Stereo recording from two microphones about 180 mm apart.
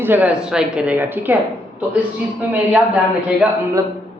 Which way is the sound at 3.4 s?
5° right (ahead or behind).